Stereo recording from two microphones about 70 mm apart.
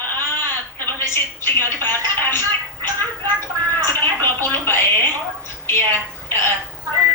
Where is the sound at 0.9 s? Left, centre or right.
Left.